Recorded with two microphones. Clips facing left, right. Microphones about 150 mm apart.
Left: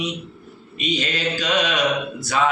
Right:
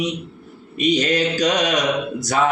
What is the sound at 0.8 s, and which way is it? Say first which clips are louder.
Mantra: right 6 dB; 45° right (ahead or behind).